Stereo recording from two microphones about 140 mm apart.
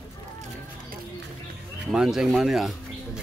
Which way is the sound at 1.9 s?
5° right (ahead or behind).